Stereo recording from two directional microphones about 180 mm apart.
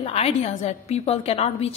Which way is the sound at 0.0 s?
35° left (ahead or behind).